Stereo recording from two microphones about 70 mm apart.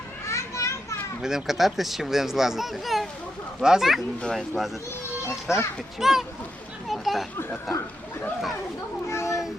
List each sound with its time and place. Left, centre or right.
0.3 s children playing: left
1.2 s speech: centre
5.5 s a child's voice: left
6.0 s speech: centre
6.8 s a sound: centre
9.0 s a sound: left